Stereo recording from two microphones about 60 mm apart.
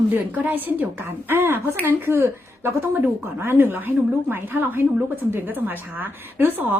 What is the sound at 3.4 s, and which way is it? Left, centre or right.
Speech, right.